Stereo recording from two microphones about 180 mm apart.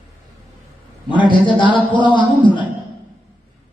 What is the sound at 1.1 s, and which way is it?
Speech, 25° left (ahead or behind).